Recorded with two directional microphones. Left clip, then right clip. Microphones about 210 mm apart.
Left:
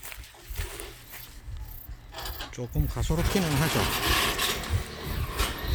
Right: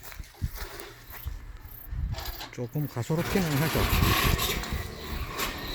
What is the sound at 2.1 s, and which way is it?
Pulleys, 40° right (ahead or behind).